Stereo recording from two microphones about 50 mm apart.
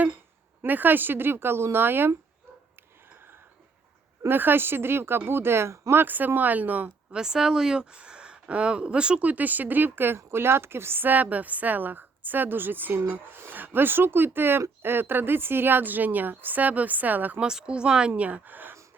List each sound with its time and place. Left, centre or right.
0.6 s speech: right
4.3 s speech: right
5.9 s a woman's voice: right
7.1 s a woman's voice: centre; by 17.4 s right
17.4 s speech: centre
18.1 s a woman's voice: right